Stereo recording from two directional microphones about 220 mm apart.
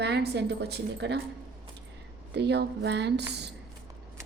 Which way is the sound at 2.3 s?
50° right (ahead or behind).